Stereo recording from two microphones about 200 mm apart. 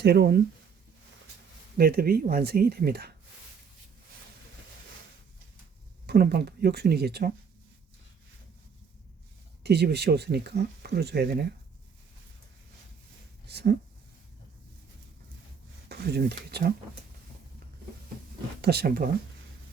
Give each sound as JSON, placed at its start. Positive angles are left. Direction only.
{"t": 0.0, "sound": "speech", "side_deg": -55}
{"t": 1.8, "sound": "speech", "side_deg": -50}
{"t": 6.1, "sound": "speech", "side_deg": -55}
{"t": 9.6, "sound": "speech", "side_deg": -55}
{"t": 13.5, "sound": "speech", "side_deg": -55}
{"t": 15.9, "sound": "speech", "side_deg": -55}
{"t": 18.6, "sound": "speech", "side_deg": -55}